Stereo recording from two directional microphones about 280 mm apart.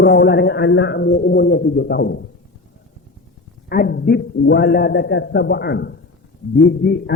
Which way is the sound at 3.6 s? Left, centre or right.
Left.